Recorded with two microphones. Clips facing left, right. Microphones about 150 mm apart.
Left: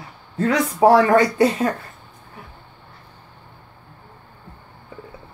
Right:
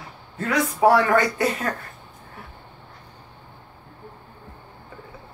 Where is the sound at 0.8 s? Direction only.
30° left (ahead or behind).